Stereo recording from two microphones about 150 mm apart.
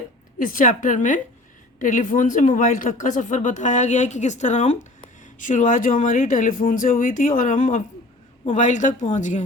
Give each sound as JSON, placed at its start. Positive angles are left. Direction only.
{"t": 0.3, "sound": "speech", "side_deg": 60}